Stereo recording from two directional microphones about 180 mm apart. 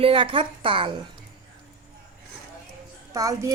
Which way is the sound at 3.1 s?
20° right (ahead or behind).